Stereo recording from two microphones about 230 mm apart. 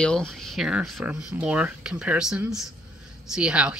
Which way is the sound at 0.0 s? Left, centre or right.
Centre.